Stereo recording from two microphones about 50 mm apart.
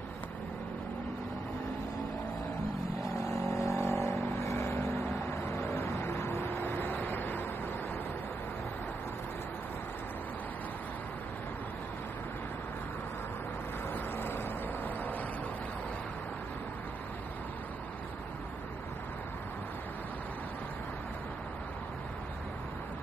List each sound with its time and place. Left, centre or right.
3.2 s vehicle: left
6.6 s vehicle: left
14.1 s vehicle: left